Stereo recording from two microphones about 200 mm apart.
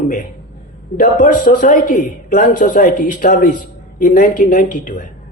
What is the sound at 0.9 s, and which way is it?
A man's voice, 40° left (ahead or behind).